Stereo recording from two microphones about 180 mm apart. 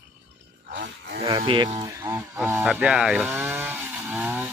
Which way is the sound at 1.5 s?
30° right (ahead or behind).